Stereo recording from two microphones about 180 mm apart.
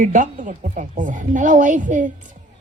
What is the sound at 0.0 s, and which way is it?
A woman's voice, 45° right (ahead or behind).